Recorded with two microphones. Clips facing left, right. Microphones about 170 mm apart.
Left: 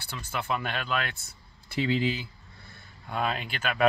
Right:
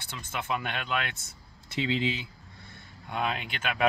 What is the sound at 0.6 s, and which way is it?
A man's voice, 20° right (ahead or behind).